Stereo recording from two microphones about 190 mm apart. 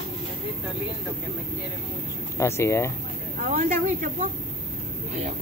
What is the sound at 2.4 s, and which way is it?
Speech, 15° left (ahead or behind).